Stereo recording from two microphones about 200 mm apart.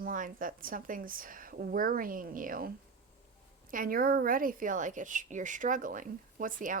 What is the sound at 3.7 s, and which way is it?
A woman's voice, 45° right (ahead or behind).